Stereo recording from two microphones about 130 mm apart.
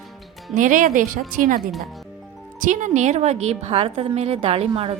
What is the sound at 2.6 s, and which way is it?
A woman's voice, 75° right (ahead or behind).